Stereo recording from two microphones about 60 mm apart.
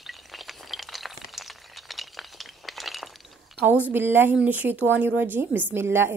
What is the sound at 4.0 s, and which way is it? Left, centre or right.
A woman's voice, right.